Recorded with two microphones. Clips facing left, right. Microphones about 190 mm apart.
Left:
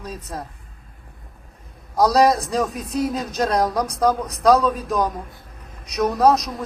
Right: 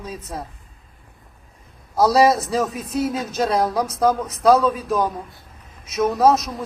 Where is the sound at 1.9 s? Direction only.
5° right (ahead or behind).